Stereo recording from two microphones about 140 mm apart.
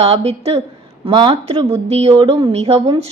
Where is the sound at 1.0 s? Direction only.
35° right (ahead or behind).